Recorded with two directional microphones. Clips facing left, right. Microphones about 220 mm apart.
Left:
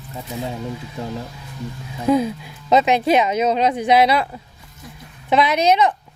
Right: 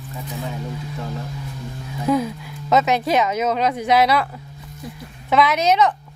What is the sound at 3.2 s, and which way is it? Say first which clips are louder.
A man's voice: left 2 dB; 30° left (ahead or behind).